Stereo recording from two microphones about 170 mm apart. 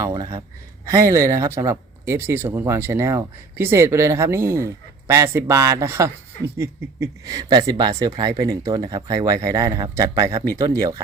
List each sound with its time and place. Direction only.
0.0 s speech: 20° right (ahead or behind)